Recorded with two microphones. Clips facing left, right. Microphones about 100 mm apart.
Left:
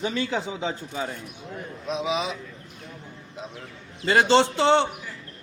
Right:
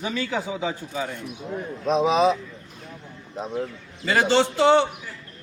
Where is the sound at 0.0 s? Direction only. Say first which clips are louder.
Even; 30° left (ahead or behind).